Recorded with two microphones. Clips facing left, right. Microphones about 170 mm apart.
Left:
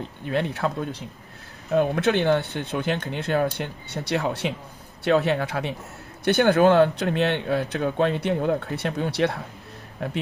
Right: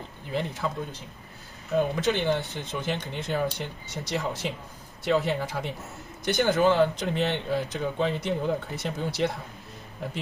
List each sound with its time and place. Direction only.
0.3 s speech: 70° left (ahead or behind)
1.7 s speech: 60° left (ahead or behind)